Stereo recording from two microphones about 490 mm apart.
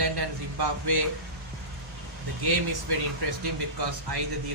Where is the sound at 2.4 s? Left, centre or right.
Right.